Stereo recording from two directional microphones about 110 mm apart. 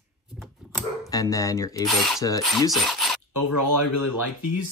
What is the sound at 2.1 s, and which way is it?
Speech, 30° left (ahead or behind).